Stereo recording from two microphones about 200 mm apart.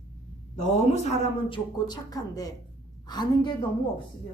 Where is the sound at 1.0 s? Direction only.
25° left (ahead or behind).